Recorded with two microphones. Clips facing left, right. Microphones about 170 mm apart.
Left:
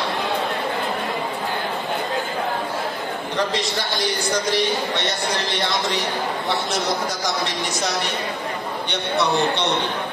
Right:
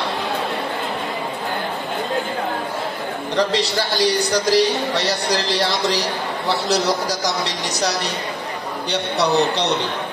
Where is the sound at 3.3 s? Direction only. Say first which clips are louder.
Right 5 dB; 35° right (ahead or behind).